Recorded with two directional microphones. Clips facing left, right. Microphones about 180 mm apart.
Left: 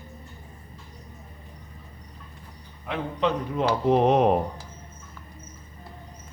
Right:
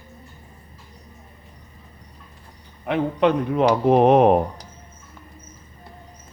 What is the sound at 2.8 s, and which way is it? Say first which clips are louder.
Speech: right 7 dB; 60° right (ahead or behind).